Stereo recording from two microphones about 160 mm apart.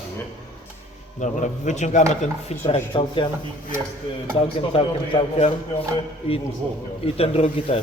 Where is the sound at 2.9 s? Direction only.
30° left (ahead or behind).